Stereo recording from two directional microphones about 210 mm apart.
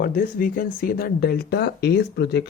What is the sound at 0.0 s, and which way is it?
Speech, 45° left (ahead or behind).